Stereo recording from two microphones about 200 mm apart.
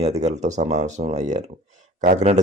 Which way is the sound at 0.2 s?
35° right (ahead or behind).